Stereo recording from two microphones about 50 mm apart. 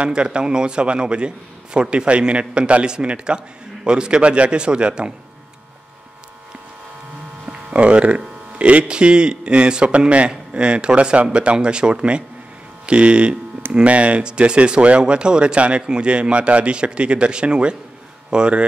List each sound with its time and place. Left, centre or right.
0.0 s a man's voice: centre
7.7 s a man's voice: right